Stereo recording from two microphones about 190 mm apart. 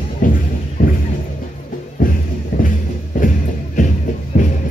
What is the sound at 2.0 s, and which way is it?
Music, 45° left (ahead or behind).